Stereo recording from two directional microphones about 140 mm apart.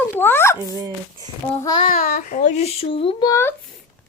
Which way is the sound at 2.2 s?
65° left (ahead or behind).